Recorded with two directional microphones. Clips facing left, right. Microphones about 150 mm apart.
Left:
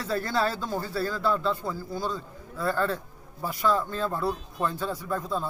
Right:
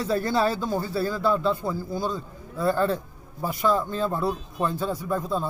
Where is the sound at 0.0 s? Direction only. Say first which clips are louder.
Right 4 dB; 15° right (ahead or behind).